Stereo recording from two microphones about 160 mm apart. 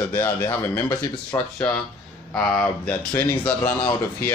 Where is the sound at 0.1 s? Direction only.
10° left (ahead or behind).